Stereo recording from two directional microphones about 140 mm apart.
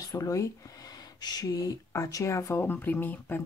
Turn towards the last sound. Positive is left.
turn(degrees=15)  # may be behind; listen again after turning